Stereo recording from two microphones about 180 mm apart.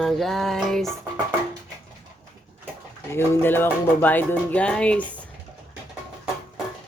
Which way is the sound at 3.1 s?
10° left (ahead or behind).